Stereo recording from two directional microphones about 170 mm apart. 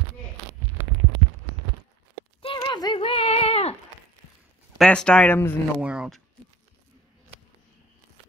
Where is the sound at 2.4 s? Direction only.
30° left (ahead or behind).